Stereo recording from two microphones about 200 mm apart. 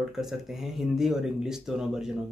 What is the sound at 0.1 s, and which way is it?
Speech, centre (ahead or behind).